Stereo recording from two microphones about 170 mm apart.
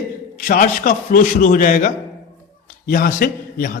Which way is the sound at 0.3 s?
50° left (ahead or behind).